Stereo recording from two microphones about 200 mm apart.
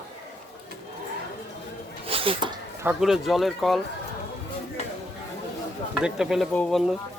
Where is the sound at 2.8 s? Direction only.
Centre (ahead or behind).